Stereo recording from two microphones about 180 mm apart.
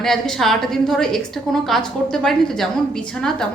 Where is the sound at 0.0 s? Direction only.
Centre (ahead or behind).